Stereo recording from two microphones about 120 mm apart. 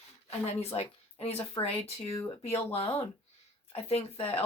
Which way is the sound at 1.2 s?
15° left (ahead or behind).